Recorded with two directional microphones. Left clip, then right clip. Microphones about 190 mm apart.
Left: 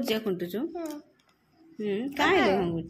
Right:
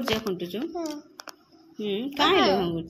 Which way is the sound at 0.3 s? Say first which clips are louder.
Even; 20° left (ahead or behind).